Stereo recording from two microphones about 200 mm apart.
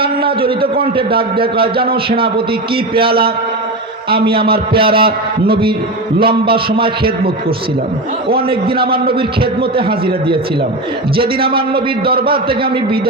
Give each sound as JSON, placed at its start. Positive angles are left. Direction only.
{"t": 0.0, "sound": "a man's voice", "side_deg": -25}
{"t": 2.0, "sound": "a man's voice", "side_deg": -25}
{"t": 3.1, "sound": "a man's voice", "side_deg": -50}
{"t": 4.4, "sound": "a man's voice", "side_deg": -50}
{"t": 4.8, "sound": "a man's voice", "side_deg": -25}
{"t": 8.4, "sound": "a man's voice", "side_deg": -25}
{"t": 11.2, "sound": "a man's voice", "side_deg": -25}
{"t": 12.1, "sound": "a man's voice", "side_deg": -50}